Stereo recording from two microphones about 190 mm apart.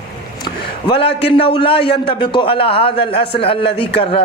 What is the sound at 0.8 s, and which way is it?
A man's voice, 30° left (ahead or behind).